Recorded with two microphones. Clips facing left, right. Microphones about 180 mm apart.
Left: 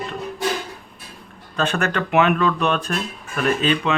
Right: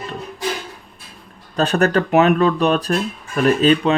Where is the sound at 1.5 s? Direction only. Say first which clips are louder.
Right 6 dB; 35° right (ahead or behind).